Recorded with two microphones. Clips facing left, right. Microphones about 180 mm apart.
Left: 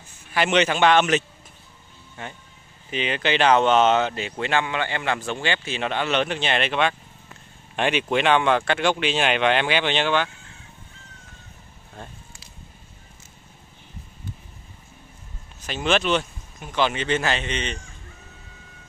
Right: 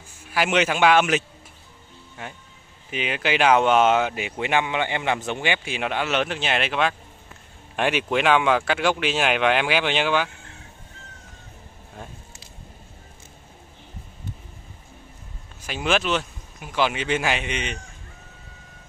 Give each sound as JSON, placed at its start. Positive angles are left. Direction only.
{"t": 0.3, "sound": "speech", "side_deg": -5}
{"t": 15.6, "sound": "speech", "side_deg": -5}